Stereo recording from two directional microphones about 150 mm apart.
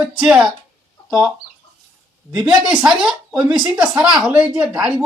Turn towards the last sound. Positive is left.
turn(degrees=-5)  # may be behind; listen again after turning